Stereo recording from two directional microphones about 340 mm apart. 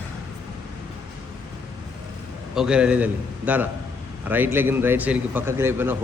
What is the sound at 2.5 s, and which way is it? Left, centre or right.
A man's voice, centre.